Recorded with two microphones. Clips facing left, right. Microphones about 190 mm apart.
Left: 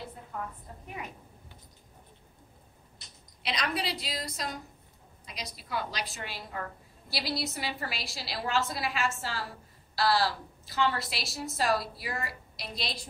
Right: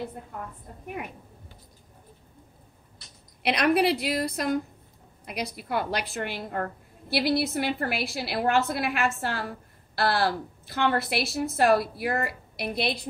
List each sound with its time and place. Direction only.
3.4 s a woman's voice: 60° right (ahead or behind)